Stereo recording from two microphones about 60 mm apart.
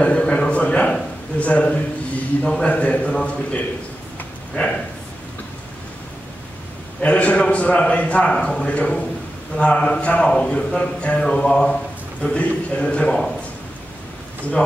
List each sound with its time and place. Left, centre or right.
0.0 s a sound: centre
2.4 s a man's voice: centre
7.0 s a man's voice: left